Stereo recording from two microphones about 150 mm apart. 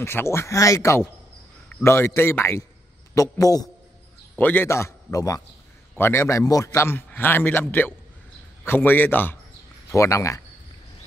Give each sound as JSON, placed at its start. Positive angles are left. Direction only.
{"t": 0.0, "sound": "a man's voice", "side_deg": 15}
{"t": 4.4, "sound": "a man's voice", "side_deg": 10}